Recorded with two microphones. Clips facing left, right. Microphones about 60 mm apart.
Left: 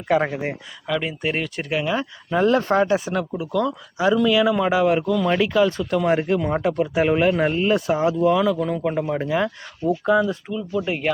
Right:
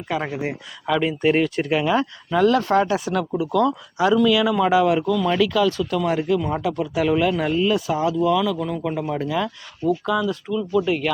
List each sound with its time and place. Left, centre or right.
0.1 s speech: left
0.9 s speech: centre
2.3 s speech: left
2.7 s speech: left